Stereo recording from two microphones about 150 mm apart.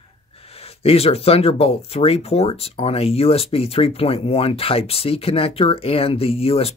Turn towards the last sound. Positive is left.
turn(degrees=40)  # may be behind; listen again after turning